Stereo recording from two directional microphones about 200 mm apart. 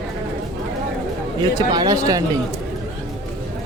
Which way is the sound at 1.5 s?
20° right (ahead or behind).